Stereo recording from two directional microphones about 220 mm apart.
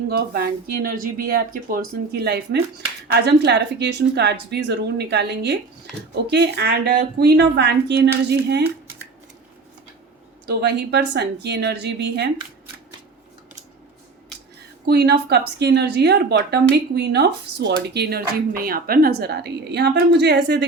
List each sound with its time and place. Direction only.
0.1 s speech: 45° right (ahead or behind)
10.4 s speech: 45° right (ahead or behind)
14.8 s speech: 45° right (ahead or behind)